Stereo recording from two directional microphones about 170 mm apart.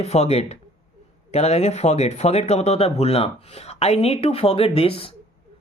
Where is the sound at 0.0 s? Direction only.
40° left (ahead or behind).